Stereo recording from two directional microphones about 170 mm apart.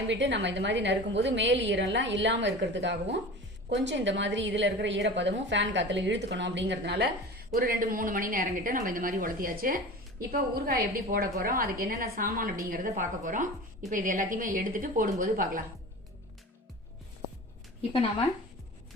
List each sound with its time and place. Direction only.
0.1 s a woman's voice: 90° right
7.5 s a woman's voice: 55° right (ahead or behind)